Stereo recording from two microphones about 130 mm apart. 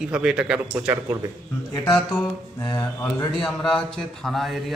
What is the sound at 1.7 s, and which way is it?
Speech, 35° left (ahead or behind).